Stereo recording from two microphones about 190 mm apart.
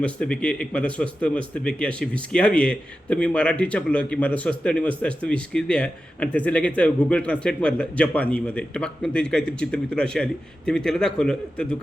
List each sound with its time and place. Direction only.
0.0 s a man's voice: 5° left (ahead or behind)